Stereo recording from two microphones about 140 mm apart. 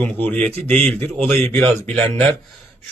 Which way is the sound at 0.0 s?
10° left (ahead or behind).